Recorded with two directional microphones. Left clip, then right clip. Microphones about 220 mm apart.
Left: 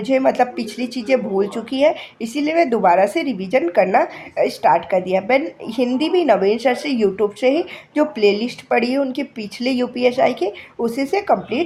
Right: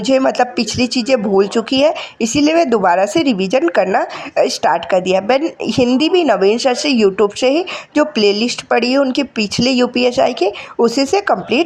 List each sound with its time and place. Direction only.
0.0 s speech: 25° right (ahead or behind)